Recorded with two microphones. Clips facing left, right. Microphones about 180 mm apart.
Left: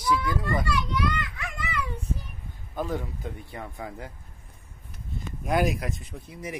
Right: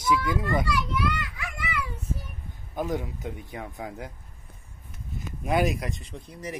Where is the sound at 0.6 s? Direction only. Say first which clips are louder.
Even; 5° right (ahead or behind).